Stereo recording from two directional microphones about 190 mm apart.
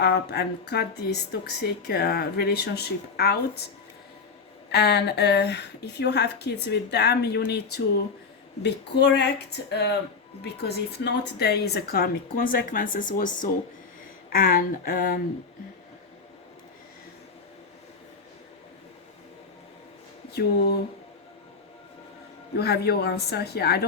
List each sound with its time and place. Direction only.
0.0 s a woman's voice: 60° left (ahead or behind)
4.7 s a woman's voice: 60° left (ahead or behind)
22.5 s a woman's voice: 55° left (ahead or behind)